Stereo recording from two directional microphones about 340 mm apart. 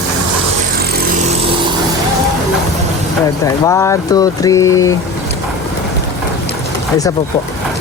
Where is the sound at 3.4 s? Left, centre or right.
Centre.